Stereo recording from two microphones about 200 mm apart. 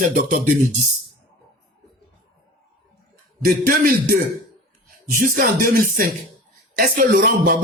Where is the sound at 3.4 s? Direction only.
45° right (ahead or behind).